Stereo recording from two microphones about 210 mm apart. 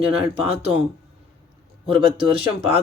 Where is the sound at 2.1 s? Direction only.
25° right (ahead or behind).